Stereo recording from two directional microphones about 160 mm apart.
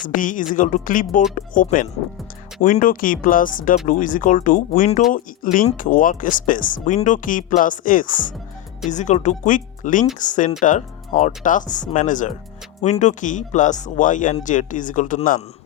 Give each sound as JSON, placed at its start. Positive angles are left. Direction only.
{"t": 0.1, "sound": "speech", "side_deg": 55}